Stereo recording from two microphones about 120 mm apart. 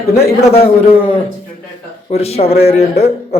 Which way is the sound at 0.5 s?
55° left (ahead or behind).